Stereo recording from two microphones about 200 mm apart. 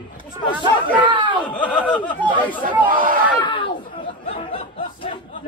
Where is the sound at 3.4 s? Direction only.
25° left (ahead or behind).